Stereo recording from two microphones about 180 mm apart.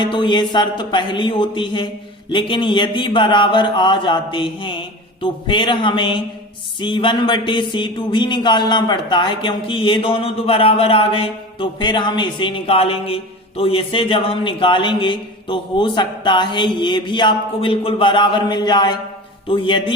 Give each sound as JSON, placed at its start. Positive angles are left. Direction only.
{"t": 0.0, "sound": "speech", "side_deg": 25}